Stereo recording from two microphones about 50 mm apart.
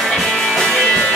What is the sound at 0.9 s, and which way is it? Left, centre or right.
Music, centre.